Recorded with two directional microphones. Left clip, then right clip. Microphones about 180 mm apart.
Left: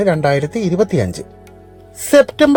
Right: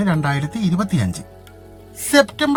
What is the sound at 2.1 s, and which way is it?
Speech, 20° left (ahead or behind).